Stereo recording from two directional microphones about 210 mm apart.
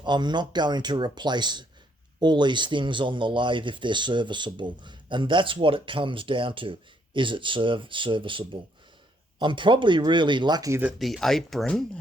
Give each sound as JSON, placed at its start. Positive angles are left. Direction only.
{"t": 0.0, "sound": "speech", "side_deg": -20}